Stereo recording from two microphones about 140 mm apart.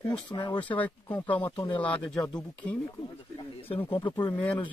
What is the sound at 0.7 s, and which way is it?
Speech, 10° left (ahead or behind).